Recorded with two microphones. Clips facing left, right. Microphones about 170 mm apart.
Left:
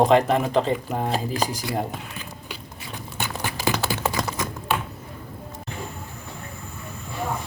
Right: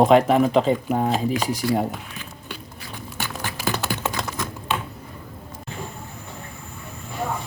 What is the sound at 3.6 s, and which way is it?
Typing, 10° left (ahead or behind).